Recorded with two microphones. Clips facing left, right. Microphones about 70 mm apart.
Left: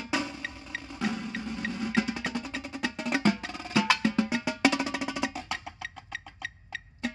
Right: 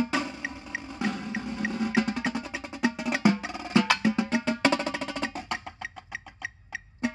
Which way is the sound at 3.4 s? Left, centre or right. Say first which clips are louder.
Right 3 dB; centre.